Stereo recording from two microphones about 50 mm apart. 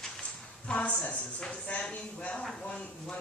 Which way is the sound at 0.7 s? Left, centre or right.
Left.